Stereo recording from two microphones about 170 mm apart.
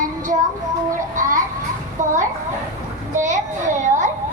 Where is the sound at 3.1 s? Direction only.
45° right (ahead or behind).